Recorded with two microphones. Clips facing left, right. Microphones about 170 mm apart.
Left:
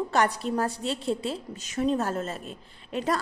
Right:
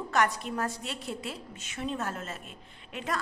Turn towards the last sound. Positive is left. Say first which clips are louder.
# left 7 dB
turn(degrees=35)  # may be behind; listen again after turning